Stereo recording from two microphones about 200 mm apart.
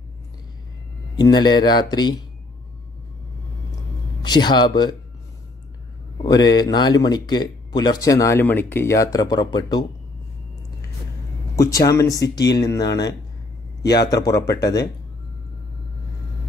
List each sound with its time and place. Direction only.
1.1 s speech: 20° left (ahead or behind)
4.2 s a man's voice: 20° left (ahead or behind)
6.2 s speech: 20° left (ahead or behind)
11.5 s speech: 15° left (ahead or behind)
13.8 s speech: 20° left (ahead or behind)